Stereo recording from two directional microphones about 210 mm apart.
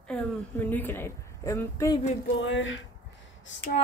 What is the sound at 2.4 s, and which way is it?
Speech, 65° left (ahead or behind).